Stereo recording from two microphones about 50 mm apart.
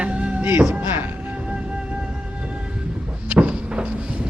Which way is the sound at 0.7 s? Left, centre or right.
Right.